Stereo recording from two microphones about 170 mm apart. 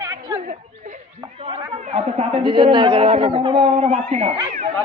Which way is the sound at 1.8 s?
35° right (ahead or behind).